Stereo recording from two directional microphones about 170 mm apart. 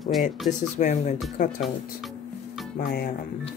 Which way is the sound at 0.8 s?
40° left (ahead or behind).